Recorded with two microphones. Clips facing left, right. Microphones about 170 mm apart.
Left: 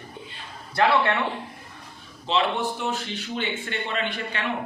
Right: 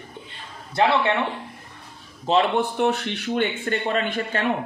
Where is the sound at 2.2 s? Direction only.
50° right (ahead or behind).